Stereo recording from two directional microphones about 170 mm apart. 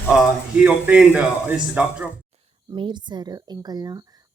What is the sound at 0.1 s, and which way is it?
Speech, 5° right (ahead or behind).